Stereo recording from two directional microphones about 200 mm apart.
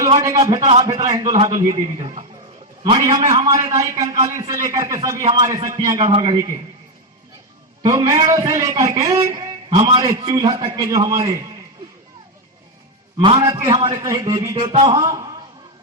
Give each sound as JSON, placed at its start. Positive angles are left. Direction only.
{"t": 0.2, "sound": "a man's voice", "side_deg": -15}
{"t": 0.6, "sound": "a man's voice", "side_deg": -30}
{"t": 0.9, "sound": "a man's voice", "side_deg": -20}
{"t": 6.1, "sound": "a man's voice", "side_deg": -30}
{"t": 7.8, "sound": "a man's voice", "side_deg": -20}
{"t": 9.6, "sound": "a man's voice", "side_deg": -25}
{"t": 13.1, "sound": "a man's voice", "side_deg": -20}